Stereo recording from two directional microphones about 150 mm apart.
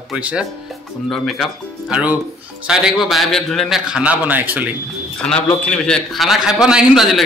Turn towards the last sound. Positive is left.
turn(degrees=-5)  # may be behind; listen again after turning